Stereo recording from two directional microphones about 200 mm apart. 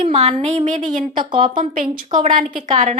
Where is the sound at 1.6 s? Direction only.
40° right (ahead or behind).